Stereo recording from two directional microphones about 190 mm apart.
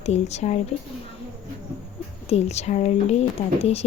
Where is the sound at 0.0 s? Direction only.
35° left (ahead or behind).